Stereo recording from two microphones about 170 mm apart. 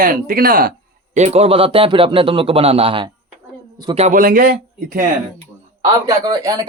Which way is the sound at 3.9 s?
45° right (ahead or behind).